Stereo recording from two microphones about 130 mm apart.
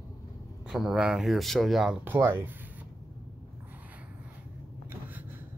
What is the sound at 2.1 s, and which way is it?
Speech, 15° right (ahead or behind).